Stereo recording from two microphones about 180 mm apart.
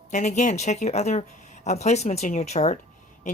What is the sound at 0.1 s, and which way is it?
A woman's voice, 40° left (ahead or behind).